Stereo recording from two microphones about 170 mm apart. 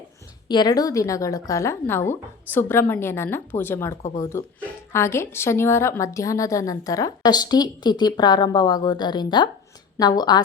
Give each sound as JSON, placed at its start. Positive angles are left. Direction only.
{"t": 0.4, "sound": "a woman's voice", "side_deg": 25}